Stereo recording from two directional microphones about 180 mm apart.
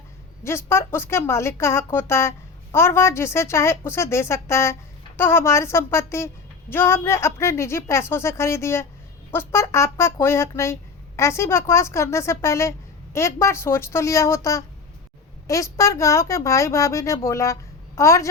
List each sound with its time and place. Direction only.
0.4 s a woman's voice: 15° left (ahead or behind)